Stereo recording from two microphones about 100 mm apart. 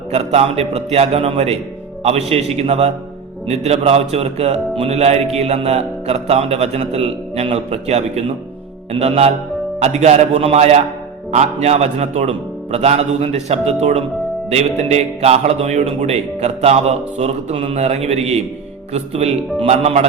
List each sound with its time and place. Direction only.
0.1 s a man's voice: 90° right